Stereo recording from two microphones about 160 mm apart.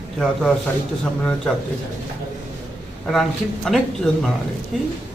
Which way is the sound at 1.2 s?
5° left (ahead or behind).